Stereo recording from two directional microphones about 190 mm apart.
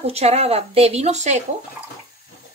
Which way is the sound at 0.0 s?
35° right (ahead or behind).